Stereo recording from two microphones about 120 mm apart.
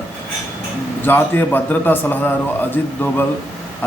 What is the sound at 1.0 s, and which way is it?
A man's voice, 15° left (ahead or behind).